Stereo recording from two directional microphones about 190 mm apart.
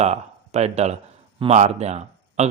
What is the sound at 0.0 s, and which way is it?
Speech, 35° right (ahead or behind).